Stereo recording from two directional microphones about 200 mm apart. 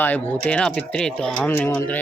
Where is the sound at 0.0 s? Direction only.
10° left (ahead or behind).